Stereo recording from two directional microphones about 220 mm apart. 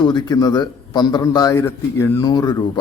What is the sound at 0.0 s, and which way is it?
A man's voice, 20° left (ahead or behind).